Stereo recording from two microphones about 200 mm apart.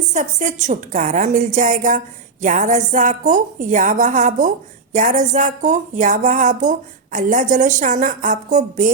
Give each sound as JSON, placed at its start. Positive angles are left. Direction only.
{"t": 0.1, "sound": "a woman's voice", "side_deg": -35}